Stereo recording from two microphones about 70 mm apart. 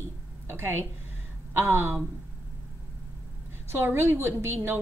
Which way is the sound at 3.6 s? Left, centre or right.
Right.